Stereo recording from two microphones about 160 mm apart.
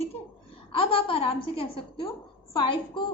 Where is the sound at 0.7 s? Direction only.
35° left (ahead or behind).